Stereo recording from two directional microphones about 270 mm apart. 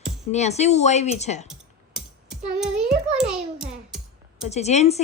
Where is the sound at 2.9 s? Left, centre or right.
Right.